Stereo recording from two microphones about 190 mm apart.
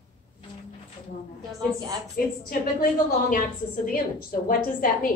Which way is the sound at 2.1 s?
50° left (ahead or behind).